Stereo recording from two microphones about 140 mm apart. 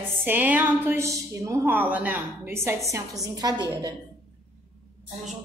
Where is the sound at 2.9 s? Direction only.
25° right (ahead or behind).